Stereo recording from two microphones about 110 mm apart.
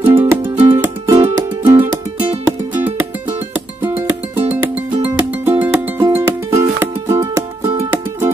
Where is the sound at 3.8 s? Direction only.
20° right (ahead or behind).